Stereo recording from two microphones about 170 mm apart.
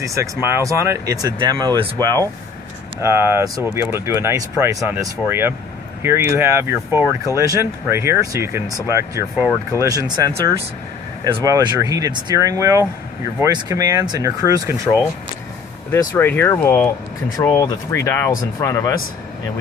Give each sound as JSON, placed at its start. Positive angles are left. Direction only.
{"t": 0.0, "sound": "speech", "side_deg": -15}
{"t": 2.0, "sound": "speech", "side_deg": 15}
{"t": 3.0, "sound": "speech", "side_deg": -15}
{"t": 15.9, "sound": "speech", "side_deg": 15}